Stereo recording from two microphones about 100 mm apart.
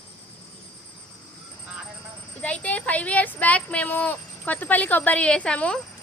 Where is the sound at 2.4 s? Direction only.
15° left (ahead or behind).